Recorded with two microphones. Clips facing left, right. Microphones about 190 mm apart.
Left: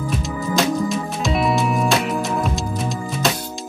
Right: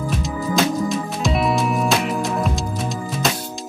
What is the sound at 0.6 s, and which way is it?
Music, centre (ahead or behind).